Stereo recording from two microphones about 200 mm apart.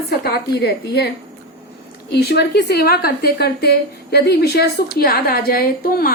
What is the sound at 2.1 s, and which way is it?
A woman's voice, 55° left (ahead or behind).